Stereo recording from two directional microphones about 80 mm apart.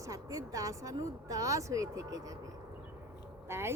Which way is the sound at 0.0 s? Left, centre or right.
Right.